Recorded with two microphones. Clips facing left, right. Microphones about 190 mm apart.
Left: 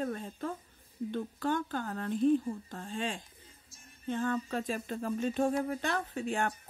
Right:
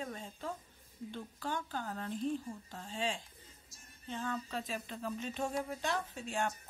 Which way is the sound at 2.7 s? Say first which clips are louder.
Left 2 dB; 50° left (ahead or behind).